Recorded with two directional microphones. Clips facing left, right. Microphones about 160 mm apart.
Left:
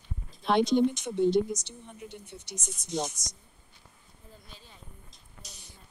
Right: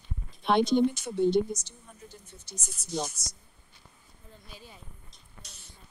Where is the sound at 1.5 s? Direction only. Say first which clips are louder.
Left 2 dB; 70° left (ahead or behind).